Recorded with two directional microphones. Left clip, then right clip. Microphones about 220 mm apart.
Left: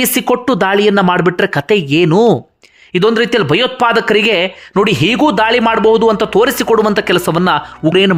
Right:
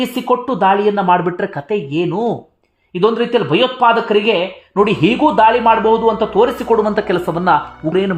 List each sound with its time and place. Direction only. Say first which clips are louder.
0.0 s speech: left 3 dB; 30° left (ahead or behind)